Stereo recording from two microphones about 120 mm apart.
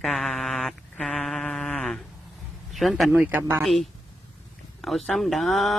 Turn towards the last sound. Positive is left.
turn(degrees=0)  # may be behind; listen again after turning